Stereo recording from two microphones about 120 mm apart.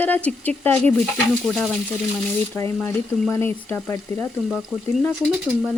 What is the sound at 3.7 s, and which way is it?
Speech, 15° left (ahead or behind).